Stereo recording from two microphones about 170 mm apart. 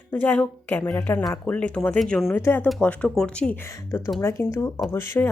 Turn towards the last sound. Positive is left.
turn(degrees=15)  # may be behind; listen again after turning